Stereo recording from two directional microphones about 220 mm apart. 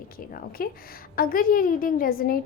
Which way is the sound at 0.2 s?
40° left (ahead or behind).